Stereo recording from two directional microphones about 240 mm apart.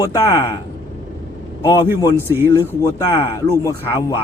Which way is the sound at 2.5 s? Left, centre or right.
Centre.